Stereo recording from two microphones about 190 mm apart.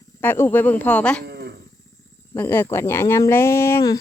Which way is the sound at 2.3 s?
10° left (ahead or behind).